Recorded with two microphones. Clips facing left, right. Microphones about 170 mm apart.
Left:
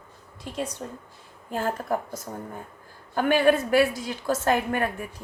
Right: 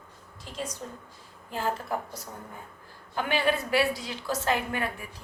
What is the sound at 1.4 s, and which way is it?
A woman's voice, 50° left (ahead or behind).